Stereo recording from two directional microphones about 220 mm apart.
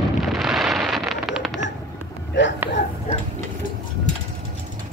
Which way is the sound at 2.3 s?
55° left (ahead or behind).